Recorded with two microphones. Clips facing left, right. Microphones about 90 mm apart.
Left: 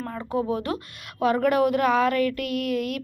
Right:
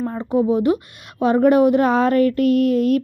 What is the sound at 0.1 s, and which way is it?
A woman's voice, 25° right (ahead or behind).